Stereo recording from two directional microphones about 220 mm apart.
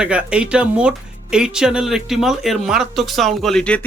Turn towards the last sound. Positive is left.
turn(degrees=5)  # may be behind; listen again after turning